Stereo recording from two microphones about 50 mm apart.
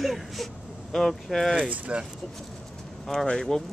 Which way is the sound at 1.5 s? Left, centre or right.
Right.